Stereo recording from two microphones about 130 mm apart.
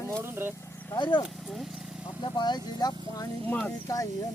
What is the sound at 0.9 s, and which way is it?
Speech, 35° left (ahead or behind).